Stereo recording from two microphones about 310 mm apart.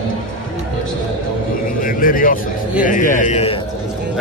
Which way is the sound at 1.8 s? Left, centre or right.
Left.